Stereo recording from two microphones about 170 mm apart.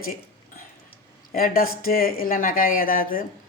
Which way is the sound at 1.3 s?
60° left (ahead or behind).